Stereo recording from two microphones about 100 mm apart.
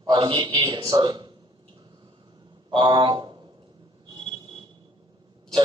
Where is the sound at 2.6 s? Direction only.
50° right (ahead or behind).